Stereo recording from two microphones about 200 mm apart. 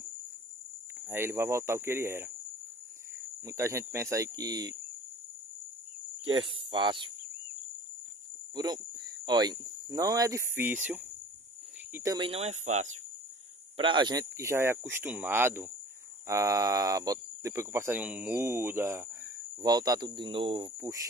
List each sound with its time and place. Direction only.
1.0 s speech: 10° right (ahead or behind)
3.4 s speech: 15° right (ahead or behind)
6.4 s speech: 25° right (ahead or behind)
8.5 s speech: 20° right (ahead or behind)
12.3 s speech: 30° right (ahead or behind)
13.7 s speech: 25° right (ahead or behind)